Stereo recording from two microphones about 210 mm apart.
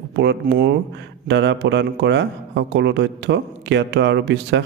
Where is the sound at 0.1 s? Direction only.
55° right (ahead or behind).